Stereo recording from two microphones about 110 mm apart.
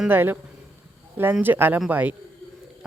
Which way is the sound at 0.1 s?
20° right (ahead or behind).